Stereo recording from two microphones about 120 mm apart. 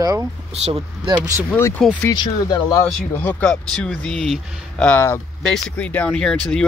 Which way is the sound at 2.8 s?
10° left (ahead or behind).